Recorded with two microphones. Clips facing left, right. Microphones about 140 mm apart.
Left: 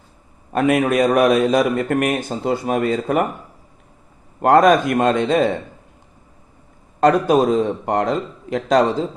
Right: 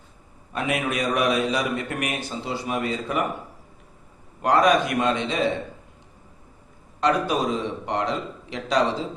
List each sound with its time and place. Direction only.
0.5 s a man's voice: 50° left (ahead or behind)
4.4 s a man's voice: 50° left (ahead or behind)
7.0 s a man's voice: 50° left (ahead or behind)